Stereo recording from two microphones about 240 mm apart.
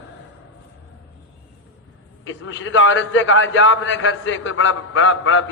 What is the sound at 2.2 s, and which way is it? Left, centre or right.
A man's voice, left.